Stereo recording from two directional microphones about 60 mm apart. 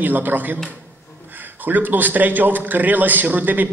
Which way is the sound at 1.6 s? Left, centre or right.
Right.